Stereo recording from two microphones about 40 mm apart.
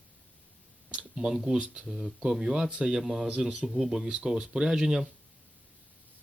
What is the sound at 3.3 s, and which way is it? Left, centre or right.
Speech, right.